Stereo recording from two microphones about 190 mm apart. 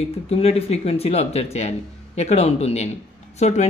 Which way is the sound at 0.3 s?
35° left (ahead or behind).